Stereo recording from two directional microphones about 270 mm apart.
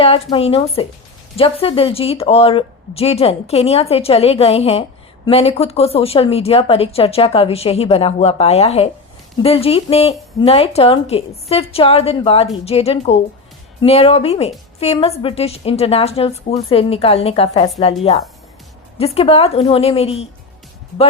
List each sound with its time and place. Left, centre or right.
0.0 s a woman's voice: left
18.9 s a woman's voice: left